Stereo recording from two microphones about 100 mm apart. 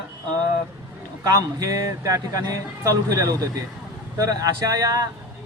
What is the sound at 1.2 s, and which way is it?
A man's voice, 35° right (ahead or behind).